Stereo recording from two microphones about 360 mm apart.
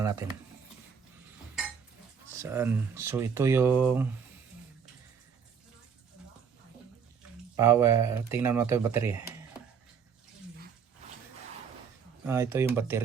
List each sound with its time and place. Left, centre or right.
0.0 s speech: centre
2.2 s speech: centre
7.5 s speech: centre
12.2 s speech: centre